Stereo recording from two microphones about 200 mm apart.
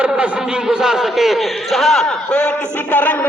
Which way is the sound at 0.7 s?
Centre (ahead or behind).